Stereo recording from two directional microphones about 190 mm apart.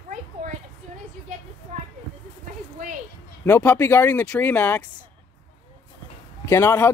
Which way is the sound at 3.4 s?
10° left (ahead or behind).